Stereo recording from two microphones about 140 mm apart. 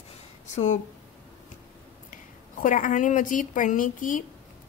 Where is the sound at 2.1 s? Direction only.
65° left (ahead or behind).